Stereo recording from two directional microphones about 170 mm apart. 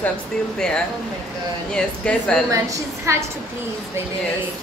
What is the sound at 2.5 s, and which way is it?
Speech, 20° right (ahead or behind).